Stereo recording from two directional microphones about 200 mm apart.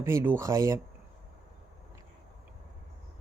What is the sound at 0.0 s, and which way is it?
Speech, 15° right (ahead or behind).